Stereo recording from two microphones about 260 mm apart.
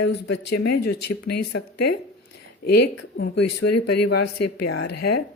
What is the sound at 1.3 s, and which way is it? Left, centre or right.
Speech, left.